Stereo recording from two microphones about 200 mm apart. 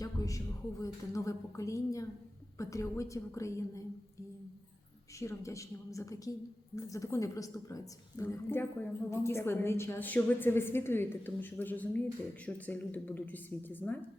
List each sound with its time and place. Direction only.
0.0 s a woman's voice: 15° left (ahead or behind)
5.2 s a woman's voice: 15° left (ahead or behind)